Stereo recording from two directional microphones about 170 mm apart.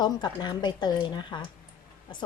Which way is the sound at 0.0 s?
25° left (ahead or behind).